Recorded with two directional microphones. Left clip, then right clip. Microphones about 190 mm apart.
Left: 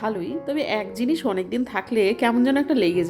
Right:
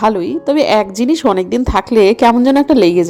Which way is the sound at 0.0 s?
35° right (ahead or behind).